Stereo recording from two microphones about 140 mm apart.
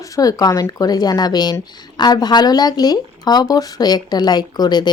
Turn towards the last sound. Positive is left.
turn(degrees=30)  # may be behind; listen again after turning